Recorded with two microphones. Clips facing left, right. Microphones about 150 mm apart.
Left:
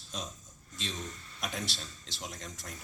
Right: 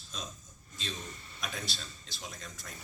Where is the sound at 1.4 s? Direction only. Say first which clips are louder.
Left 3 dB; 80° left.